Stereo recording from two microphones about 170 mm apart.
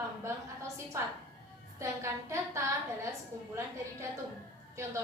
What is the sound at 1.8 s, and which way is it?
A woman's voice, 15° right (ahead or behind).